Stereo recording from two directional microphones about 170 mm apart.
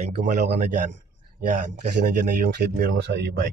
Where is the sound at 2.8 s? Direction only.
70° right (ahead or behind).